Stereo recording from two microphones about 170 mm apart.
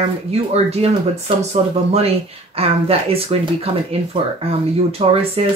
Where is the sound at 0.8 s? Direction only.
40° right (ahead or behind).